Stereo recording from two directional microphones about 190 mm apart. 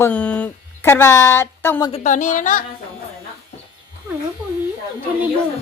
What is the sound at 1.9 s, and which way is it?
Speech, 40° left (ahead or behind).